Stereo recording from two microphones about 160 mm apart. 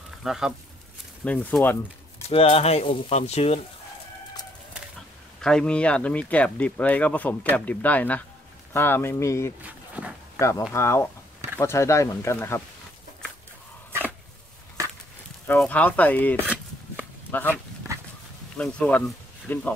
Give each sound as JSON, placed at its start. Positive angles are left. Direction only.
{"t": 0.2, "sound": "speech", "side_deg": -5}
{"t": 1.2, "sound": "speech", "side_deg": 10}
{"t": 2.2, "sound": "speech", "side_deg": 35}
{"t": 5.4, "sound": "speech", "side_deg": 5}
{"t": 9.6, "sound": "dog", "side_deg": -10}
{"t": 10.7, "sound": "speech", "side_deg": 15}
{"t": 15.4, "sound": "speech", "side_deg": 10}
{"t": 16.3, "sound": "a sound", "side_deg": -10}
{"t": 17.3, "sound": "speech", "side_deg": 10}
{"t": 18.6, "sound": "speech", "side_deg": 5}